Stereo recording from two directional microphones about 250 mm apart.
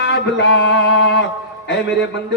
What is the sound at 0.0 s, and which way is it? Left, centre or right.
Mantra, left.